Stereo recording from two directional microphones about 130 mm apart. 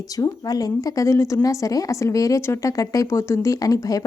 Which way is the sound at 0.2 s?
30° left (ahead or behind).